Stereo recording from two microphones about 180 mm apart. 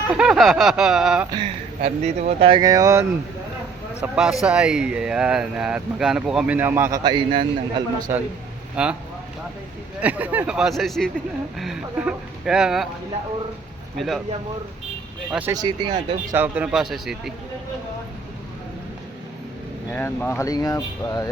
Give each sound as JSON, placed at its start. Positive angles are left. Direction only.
{"t": 0.1, "sound": "speech", "side_deg": -5}
{"t": 1.3, "sound": "speech", "side_deg": -30}
{"t": 4.0, "sound": "speech", "side_deg": -5}
{"t": 7.0, "sound": "speech", "side_deg": -25}
{"t": 8.7, "sound": "speech", "side_deg": -5}
{"t": 10.0, "sound": "speech", "side_deg": -10}
{"t": 13.9, "sound": "speech", "side_deg": 0}
{"t": 15.3, "sound": "speech", "side_deg": -10}
{"t": 15.5, "sound": "speech", "side_deg": -25}
{"t": 16.3, "sound": "speech", "side_deg": -10}
{"t": 19.9, "sound": "speech", "side_deg": 10}